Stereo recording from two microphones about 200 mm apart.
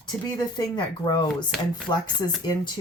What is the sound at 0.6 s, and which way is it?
Speech, 20° left (ahead or behind).